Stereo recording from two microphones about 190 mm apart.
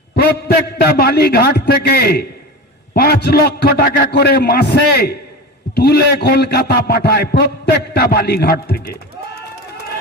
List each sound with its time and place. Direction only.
0.2 s a man's voice: 55° left (ahead or behind)